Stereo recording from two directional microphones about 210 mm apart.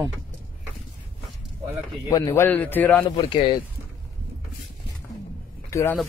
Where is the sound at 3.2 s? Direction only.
20° left (ahead or behind).